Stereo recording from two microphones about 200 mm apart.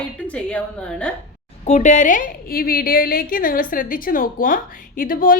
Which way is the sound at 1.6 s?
35° left (ahead or behind).